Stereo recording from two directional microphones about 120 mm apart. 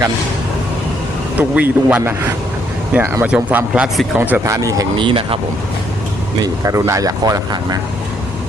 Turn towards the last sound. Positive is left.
turn(degrees=-30)  # may be behind; listen again after turning